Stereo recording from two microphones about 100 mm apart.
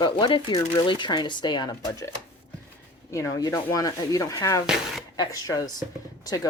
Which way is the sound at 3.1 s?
30° left (ahead or behind).